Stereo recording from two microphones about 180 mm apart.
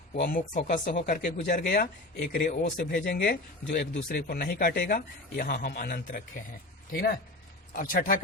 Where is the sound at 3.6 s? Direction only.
80° left.